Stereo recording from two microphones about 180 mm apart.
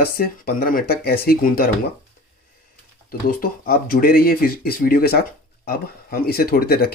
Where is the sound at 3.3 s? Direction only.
50° left (ahead or behind).